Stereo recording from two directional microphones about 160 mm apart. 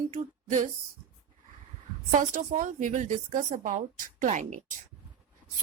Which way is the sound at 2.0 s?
55° right (ahead or behind).